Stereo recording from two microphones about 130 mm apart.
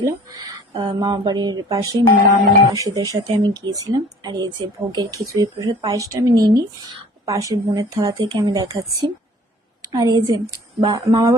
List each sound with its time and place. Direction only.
0.0 s speech: 30° right (ahead or behind)
0.7 s speech: 40° right (ahead or behind)